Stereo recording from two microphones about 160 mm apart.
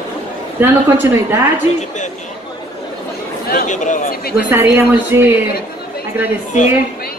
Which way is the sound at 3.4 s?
55° left (ahead or behind).